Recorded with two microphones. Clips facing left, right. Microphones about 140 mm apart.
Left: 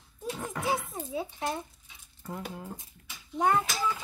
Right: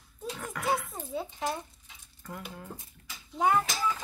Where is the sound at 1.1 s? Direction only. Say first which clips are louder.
Even; centre (ahead or behind).